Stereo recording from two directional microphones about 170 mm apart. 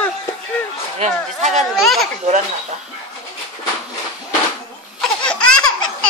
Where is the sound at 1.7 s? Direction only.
Centre (ahead or behind).